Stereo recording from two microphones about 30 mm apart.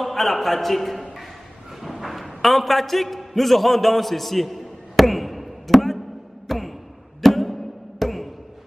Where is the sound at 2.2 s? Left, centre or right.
Centre.